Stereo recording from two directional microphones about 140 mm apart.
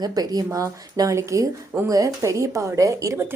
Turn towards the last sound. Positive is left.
turn(degrees=-20)  # may be behind; listen again after turning